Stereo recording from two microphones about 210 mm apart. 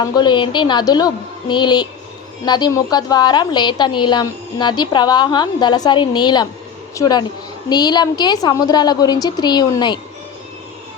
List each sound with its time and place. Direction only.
0.0 s a woman's voice: 20° left (ahead or behind)